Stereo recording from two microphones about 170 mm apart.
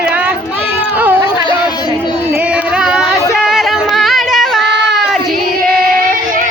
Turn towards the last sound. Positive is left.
turn(degrees=0)  # may be behind; listen again after turning